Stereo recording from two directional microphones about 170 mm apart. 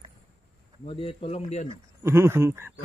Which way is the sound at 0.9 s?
35° left (ahead or behind).